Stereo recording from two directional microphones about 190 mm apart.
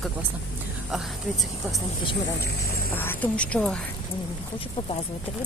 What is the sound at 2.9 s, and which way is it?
Speech, 10° left (ahead or behind).